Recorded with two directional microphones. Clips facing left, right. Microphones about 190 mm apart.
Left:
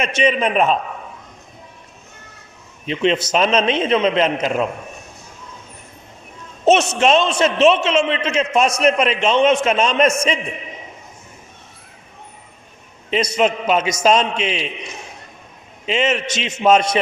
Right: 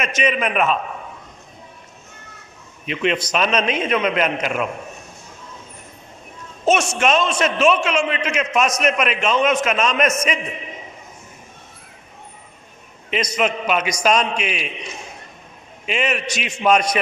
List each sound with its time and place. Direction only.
0.0 s a man's voice: 30° left (ahead or behind)
2.8 s a man's voice: 30° left (ahead or behind)
7.0 s a man's voice: 25° left (ahead or behind)
13.1 s a man's voice: 30° left (ahead or behind)
15.9 s a man's voice: 25° left (ahead or behind)